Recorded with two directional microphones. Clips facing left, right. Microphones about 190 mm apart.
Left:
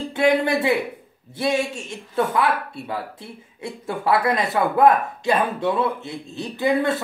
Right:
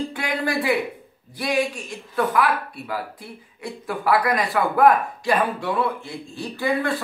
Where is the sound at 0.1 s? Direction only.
25° left (ahead or behind).